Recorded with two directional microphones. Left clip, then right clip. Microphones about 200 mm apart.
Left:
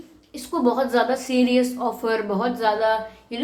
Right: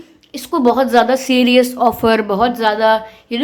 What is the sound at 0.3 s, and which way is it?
A woman's voice, 45° right (ahead or behind).